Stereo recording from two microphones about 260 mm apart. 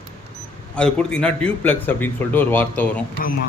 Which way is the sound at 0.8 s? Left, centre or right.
Centre.